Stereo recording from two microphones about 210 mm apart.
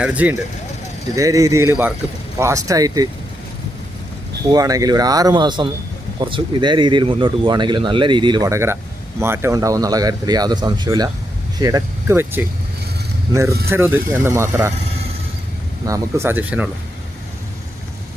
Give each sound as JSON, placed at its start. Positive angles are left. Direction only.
{"t": 0.0, "sound": "speech", "side_deg": -5}
{"t": 4.5, "sound": "speech", "side_deg": -20}
{"t": 13.7, "sound": "speech", "side_deg": -10}
{"t": 15.9, "sound": "speech", "side_deg": -10}